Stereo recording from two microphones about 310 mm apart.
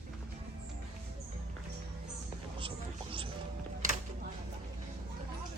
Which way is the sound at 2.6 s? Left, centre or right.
Centre.